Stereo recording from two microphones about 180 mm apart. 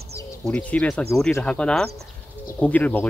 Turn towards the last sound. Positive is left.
turn(degrees=10)  # may be behind; listen again after turning